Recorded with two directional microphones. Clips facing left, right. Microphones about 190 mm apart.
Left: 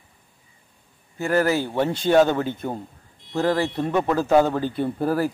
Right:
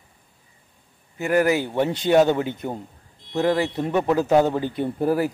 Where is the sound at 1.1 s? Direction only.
15° right (ahead or behind).